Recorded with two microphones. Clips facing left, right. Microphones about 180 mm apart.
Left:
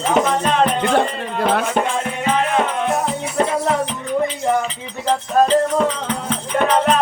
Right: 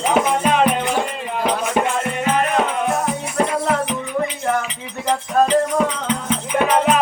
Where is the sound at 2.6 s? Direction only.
Centre (ahead or behind).